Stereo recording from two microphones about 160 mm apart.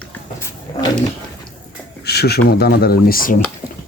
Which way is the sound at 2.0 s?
90° left.